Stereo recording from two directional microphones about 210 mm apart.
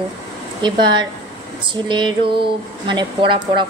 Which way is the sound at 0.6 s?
20° right (ahead or behind).